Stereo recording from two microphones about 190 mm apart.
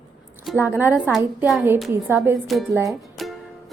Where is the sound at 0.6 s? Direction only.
10° right (ahead or behind).